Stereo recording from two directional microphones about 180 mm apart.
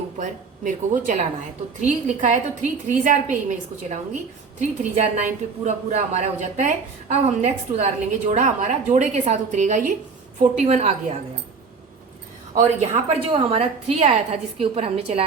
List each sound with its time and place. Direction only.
0.2 s a woman's voice: 45° right (ahead or behind)
4.8 s a woman's voice: 40° right (ahead or behind)
12.5 s a woman's voice: 40° right (ahead or behind)